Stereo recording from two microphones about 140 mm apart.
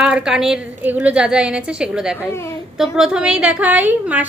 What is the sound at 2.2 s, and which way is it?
Speech, 20° left (ahead or behind).